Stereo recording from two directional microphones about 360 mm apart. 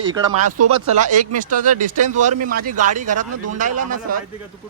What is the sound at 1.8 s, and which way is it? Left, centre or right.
Speech, right.